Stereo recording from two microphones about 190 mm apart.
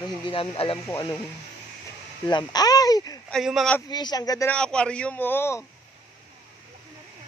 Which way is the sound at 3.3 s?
Centre (ahead or behind).